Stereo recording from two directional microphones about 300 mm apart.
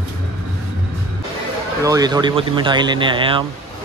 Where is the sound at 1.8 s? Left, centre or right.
Centre.